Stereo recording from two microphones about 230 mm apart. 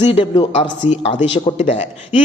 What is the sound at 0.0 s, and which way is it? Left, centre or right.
A man's voice, left.